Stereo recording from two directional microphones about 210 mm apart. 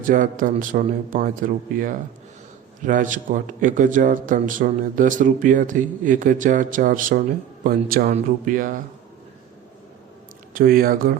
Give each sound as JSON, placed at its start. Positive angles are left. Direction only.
{"t": 0.0, "sound": "a man's voice", "side_deg": -40}
{"t": 10.5, "sound": "speech", "side_deg": -45}